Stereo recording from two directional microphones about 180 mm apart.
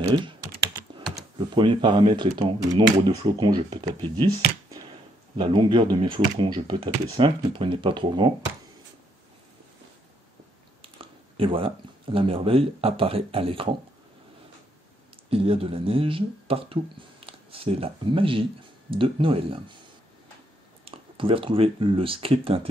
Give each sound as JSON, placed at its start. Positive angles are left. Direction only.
{"t": 1.5, "sound": "speech", "side_deg": -25}
{"t": 5.4, "sound": "speech", "side_deg": -30}
{"t": 10.8, "sound": "speech", "side_deg": -30}
{"t": 15.2, "sound": "speech", "side_deg": -30}
{"t": 20.8, "sound": "speech", "side_deg": -30}